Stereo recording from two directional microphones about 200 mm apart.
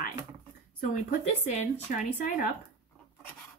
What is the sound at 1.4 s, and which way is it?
Speech, 35° left (ahead or behind).